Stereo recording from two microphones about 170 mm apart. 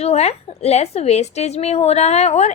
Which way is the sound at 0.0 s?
40° left (ahead or behind).